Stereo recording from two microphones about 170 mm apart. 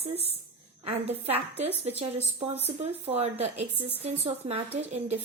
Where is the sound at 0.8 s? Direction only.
35° right (ahead or behind).